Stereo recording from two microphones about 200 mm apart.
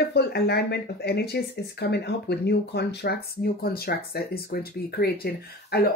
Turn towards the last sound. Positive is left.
turn(degrees=50)  # may be behind; listen again after turning